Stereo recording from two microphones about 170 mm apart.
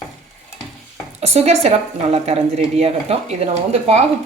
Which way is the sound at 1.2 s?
40° right (ahead or behind).